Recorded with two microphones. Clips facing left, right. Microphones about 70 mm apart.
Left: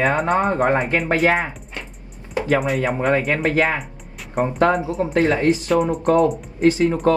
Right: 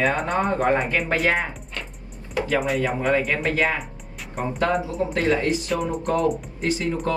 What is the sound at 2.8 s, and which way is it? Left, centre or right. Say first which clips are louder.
Speech: left 3 dB; left.